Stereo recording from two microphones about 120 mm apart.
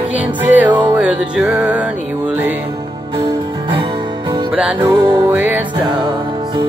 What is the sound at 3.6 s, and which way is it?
Music, 45° right (ahead or behind).